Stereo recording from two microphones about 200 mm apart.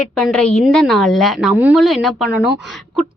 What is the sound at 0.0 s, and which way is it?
A woman's voice, 5° left (ahead or behind).